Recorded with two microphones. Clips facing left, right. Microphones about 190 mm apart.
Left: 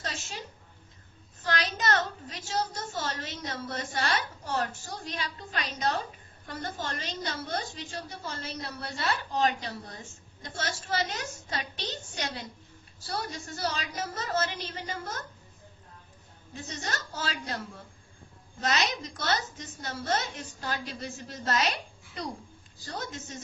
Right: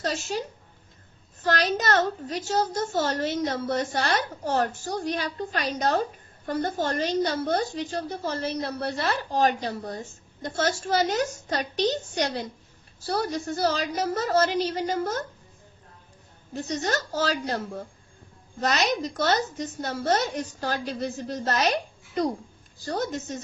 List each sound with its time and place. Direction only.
0.0 s a woman's voice: 40° right (ahead or behind)
1.5 s a woman's voice: 50° right (ahead or behind)
2.5 s a woman's voice: 45° right (ahead or behind)
17.1 s a woman's voice: 40° right (ahead or behind)